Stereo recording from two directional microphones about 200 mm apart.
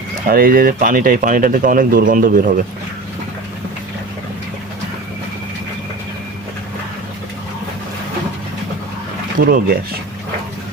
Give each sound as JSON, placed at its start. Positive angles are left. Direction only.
{"t": 0.3, "sound": "speech", "side_deg": -45}
{"t": 9.4, "sound": "speech", "side_deg": -45}